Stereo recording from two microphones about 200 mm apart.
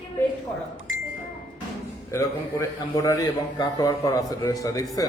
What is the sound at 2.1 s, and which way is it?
A man's voice, 15° left (ahead or behind).